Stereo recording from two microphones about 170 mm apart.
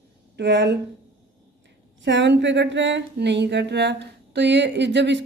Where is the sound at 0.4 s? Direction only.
90° right.